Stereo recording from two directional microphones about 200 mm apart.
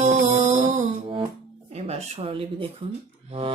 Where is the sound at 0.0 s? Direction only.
35° right (ahead or behind).